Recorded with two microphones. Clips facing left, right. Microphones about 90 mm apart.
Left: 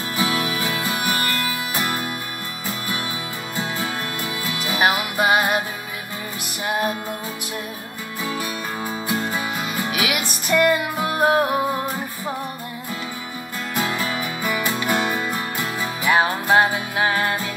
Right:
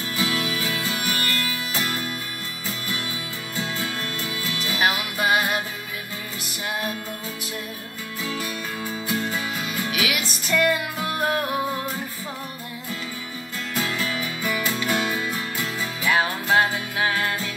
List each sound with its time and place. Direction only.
0.2 s music: 35° left (ahead or behind)
3.5 s music: 30° left (ahead or behind)
6.6 s music: 35° left (ahead or behind)
9.6 s music: 35° left (ahead or behind)
11.1 s music: 50° left (ahead or behind)
11.4 s music: 35° left (ahead or behind)
14.0 s music: 30° left (ahead or behind)